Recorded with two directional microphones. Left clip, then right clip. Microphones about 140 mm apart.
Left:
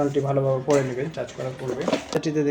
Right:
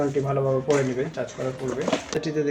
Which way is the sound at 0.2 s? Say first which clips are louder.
Left 1 dB; 25° left (ahead or behind).